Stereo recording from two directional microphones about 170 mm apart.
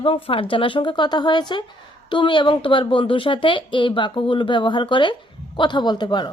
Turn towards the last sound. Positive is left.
turn(degrees=25)  # may be behind; listen again after turning